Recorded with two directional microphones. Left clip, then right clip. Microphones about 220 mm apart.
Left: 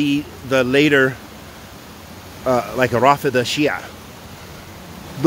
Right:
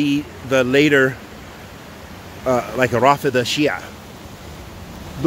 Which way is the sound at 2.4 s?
5° left (ahead or behind).